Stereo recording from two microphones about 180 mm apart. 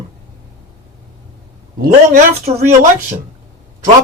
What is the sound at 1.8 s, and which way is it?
Speech, 40° right (ahead or behind).